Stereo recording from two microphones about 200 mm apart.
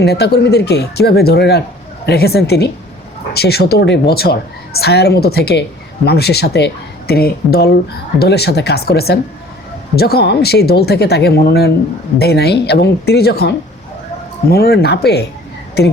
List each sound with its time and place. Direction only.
0.0 s a woman's voice: 55° left (ahead or behind)
14.5 s a woman's voice: 50° left (ahead or behind)